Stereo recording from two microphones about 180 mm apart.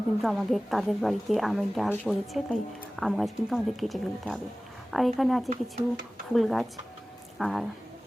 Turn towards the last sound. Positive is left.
turn(degrees=0)  # may be behind; listen again after turning